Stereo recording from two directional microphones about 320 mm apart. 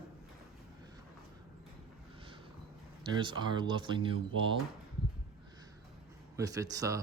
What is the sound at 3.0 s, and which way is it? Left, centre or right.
Speech, centre.